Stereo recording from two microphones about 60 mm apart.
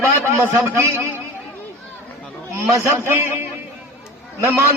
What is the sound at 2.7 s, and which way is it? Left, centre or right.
Speech, right.